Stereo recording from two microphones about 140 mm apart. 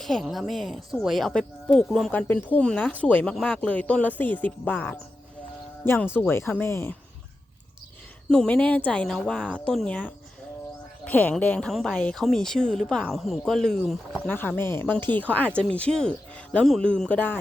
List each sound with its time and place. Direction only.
0.0 s speech: centre (ahead or behind); by 6.9 s 15° left (ahead or behind)
8.3 s speech: 5° left (ahead or behind)